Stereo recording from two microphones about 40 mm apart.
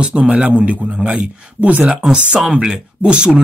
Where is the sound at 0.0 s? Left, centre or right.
Right.